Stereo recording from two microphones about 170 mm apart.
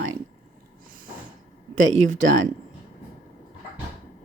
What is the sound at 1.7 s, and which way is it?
Speech, 45° right (ahead or behind).